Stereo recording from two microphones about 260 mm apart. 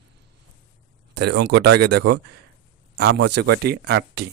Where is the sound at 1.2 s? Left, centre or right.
Right.